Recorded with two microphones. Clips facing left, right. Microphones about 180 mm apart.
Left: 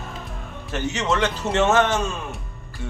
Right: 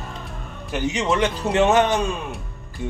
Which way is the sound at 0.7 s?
15° right (ahead or behind).